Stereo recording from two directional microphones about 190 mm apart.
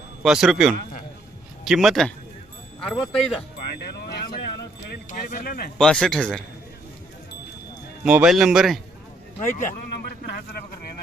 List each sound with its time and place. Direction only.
0.2 s speech: 5° right (ahead or behind)
3.8 s speech: 60° left (ahead or behind)
5.7 s speech: 5° left (ahead or behind)
8.0 s speech: 5° right (ahead or behind)
9.6 s speech: 45° left (ahead or behind)